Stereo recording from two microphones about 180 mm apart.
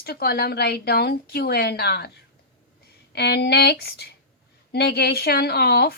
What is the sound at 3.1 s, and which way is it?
A woman's voice, 65° left (ahead or behind).